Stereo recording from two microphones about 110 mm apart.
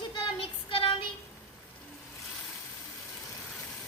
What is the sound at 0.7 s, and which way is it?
Child singing, 50° left (ahead or behind).